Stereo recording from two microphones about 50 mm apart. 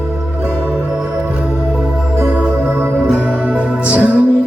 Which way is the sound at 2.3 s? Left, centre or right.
Centre.